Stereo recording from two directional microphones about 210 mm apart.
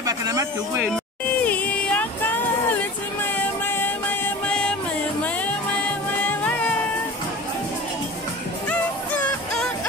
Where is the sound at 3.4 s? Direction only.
10° left (ahead or behind).